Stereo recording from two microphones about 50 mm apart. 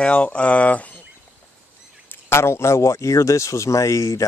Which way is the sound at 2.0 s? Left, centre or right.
Left.